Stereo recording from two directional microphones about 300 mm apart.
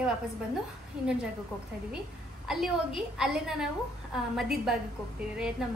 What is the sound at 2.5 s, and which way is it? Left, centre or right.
A woman's voice, centre.